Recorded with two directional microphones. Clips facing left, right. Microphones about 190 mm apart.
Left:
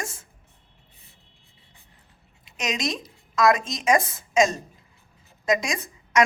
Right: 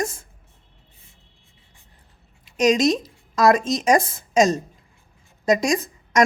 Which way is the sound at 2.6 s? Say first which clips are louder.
Right 11 dB; 35° right (ahead or behind).